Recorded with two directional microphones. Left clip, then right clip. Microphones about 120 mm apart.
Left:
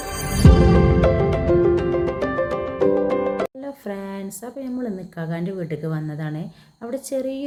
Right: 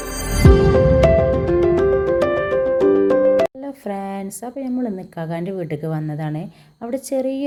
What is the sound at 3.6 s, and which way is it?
Speech, 25° right (ahead or behind).